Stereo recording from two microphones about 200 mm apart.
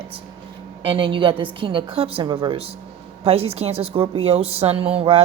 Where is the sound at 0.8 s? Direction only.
25° right (ahead or behind).